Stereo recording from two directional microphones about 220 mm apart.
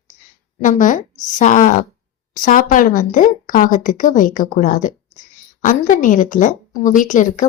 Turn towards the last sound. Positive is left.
turn(degrees=35)  # may be behind; listen again after turning